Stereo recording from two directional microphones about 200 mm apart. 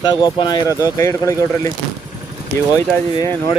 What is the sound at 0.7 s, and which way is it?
Speech, 15° right (ahead or behind).